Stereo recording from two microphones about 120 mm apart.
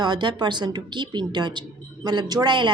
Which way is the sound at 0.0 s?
40° right (ahead or behind).